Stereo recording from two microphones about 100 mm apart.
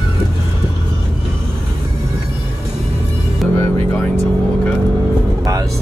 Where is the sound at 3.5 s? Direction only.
25° left (ahead or behind).